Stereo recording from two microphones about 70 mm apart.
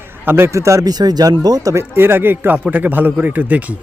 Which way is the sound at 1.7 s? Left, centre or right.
Right.